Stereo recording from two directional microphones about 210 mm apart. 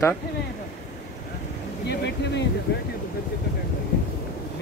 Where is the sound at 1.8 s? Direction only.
55° left (ahead or behind).